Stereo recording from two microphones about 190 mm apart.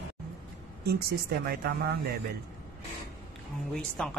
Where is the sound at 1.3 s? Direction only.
55° right (ahead or behind).